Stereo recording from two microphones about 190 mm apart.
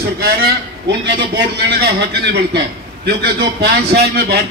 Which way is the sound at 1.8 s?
60° right (ahead or behind).